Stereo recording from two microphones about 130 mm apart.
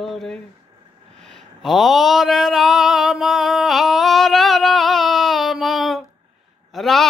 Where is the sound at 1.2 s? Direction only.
Centre (ahead or behind).